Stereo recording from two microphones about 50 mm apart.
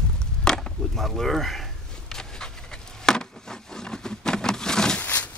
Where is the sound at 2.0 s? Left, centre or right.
Centre.